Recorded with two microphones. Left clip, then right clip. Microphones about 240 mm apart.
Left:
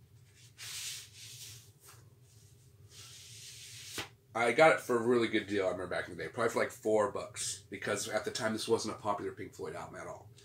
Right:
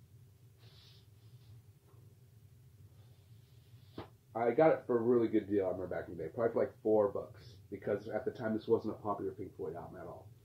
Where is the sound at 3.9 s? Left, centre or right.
Left.